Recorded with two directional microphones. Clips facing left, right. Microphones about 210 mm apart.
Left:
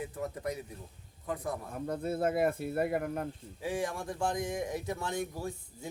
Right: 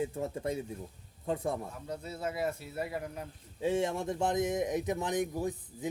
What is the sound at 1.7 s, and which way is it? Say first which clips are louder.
Speech: left 7 dB; 55° left (ahead or behind).